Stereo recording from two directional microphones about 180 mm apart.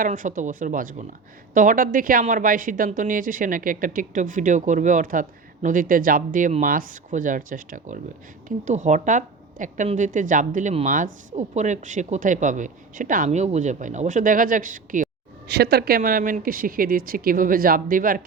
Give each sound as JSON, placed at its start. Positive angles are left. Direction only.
{"t": 0.0, "sound": "a woman's voice", "side_deg": -45}
{"t": 15.4, "sound": "a woman's voice", "side_deg": -65}